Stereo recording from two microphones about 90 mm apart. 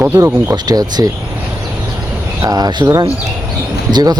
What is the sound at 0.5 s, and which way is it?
Speech, 50° right (ahead or behind).